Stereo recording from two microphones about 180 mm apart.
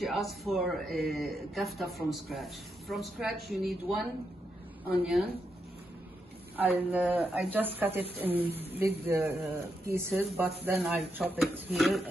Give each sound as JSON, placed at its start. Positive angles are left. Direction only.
{"t": 0.0, "sound": "speech", "side_deg": 0}
{"t": 6.5, "sound": "speech", "side_deg": -10}